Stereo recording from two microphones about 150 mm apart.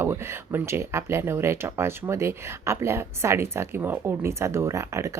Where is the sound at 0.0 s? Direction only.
15° right (ahead or behind).